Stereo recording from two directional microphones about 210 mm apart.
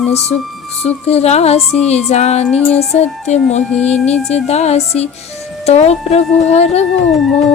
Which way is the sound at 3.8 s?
30° left (ahead or behind).